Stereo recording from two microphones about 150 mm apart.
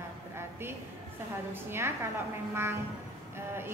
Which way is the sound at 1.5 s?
15° right (ahead or behind).